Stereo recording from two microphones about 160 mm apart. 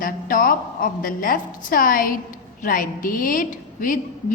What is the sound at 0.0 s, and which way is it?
A woman's voice, 60° left (ahead or behind).